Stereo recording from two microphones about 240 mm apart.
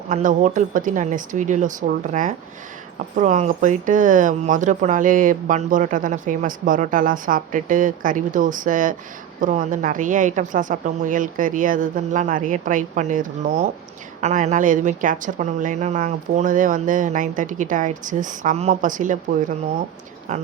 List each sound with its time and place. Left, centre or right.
0.1 s speech: right